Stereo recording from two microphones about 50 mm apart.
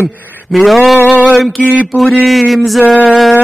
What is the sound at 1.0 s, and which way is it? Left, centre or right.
Male singing, right.